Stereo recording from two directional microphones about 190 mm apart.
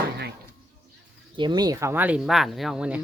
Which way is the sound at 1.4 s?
20° right (ahead or behind).